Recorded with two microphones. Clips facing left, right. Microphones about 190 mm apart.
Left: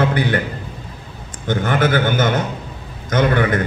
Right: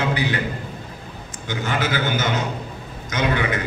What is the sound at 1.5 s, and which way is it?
A man's voice, 55° left (ahead or behind).